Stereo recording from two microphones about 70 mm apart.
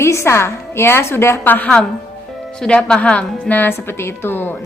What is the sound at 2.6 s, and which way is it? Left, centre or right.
A woman's voice, centre.